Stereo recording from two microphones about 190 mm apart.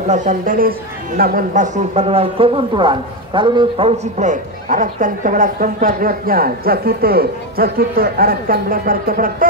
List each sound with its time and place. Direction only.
0.1 s speech: 40° right (ahead or behind)